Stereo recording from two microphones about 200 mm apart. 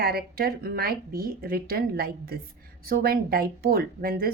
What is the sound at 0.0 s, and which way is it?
A woman's voice, 50° right (ahead or behind).